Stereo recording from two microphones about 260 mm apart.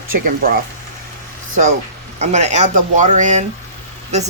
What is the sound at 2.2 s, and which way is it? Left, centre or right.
Speech, right.